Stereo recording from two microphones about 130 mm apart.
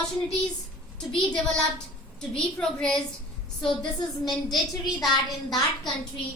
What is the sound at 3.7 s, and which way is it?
Speech, 35° left (ahead or behind).